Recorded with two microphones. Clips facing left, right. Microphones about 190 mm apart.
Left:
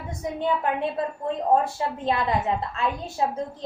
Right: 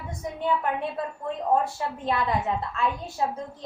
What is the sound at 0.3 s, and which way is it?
Speech, 25° left (ahead or behind).